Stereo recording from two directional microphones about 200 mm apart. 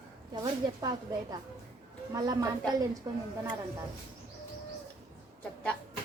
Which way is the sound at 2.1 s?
15° right (ahead or behind).